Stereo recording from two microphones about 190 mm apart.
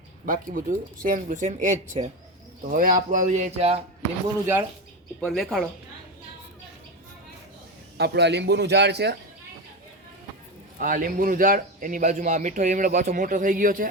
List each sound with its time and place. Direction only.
0.3 s a man's voice: 45° right (ahead or behind)
5.2 s speech: centre (ahead or behind)
7.9 s a man's voice: 60° right (ahead or behind)
10.8 s a man's voice: 45° right (ahead or behind)